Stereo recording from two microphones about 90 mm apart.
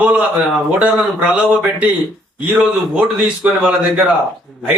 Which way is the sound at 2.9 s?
15° right (ahead or behind).